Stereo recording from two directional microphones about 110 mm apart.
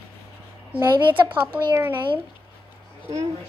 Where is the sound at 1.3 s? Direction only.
10° right (ahead or behind).